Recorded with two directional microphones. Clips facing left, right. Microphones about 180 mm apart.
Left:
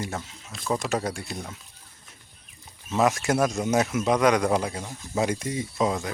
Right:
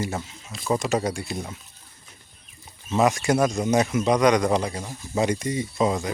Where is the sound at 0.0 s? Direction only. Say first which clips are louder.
Right 4 dB; centre (ahead or behind).